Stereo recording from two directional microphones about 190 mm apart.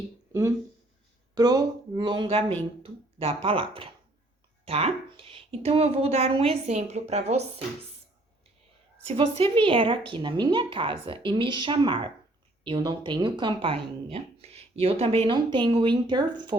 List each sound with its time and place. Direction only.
1.4 s speech: 20° right (ahead or behind)
9.0 s speech: 30° right (ahead or behind)